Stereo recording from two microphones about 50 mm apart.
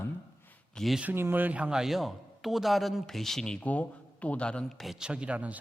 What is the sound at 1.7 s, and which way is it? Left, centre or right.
A man's voice, centre.